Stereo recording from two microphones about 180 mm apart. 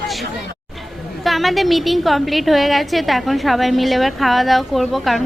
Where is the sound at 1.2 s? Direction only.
Centre (ahead or behind).